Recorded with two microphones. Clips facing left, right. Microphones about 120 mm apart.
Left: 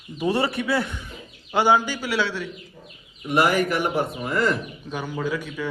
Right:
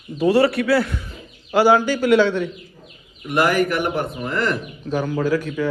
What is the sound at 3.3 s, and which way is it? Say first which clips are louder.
A man's voice: right 2 dB; 20° left (ahead or behind).